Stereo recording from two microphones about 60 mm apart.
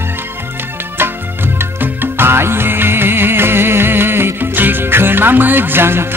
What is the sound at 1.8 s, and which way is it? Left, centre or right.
Music, right.